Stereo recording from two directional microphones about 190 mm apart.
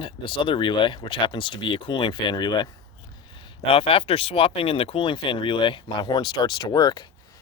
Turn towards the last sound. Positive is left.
turn(degrees=20)  # may be behind; listen again after turning